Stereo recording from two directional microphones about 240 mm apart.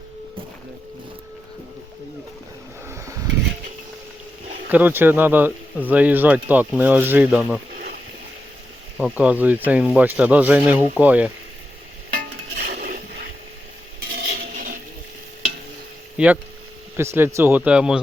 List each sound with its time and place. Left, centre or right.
4.7 s speech: centre
9.0 s speech: centre
12.1 s stir: right
14.1 s dishes: right
16.1 s speech: centre